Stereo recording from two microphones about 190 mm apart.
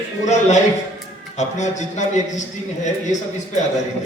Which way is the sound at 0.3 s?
40° left (ahead or behind).